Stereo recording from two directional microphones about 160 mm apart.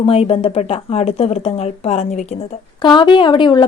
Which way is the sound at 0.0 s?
35° left (ahead or behind).